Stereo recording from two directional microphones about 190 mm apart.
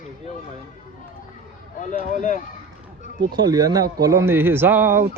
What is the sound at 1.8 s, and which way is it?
Speech, 40° left (ahead or behind).